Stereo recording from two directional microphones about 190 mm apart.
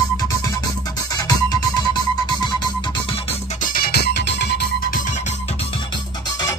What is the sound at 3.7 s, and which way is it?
Music, 55° left (ahead or behind).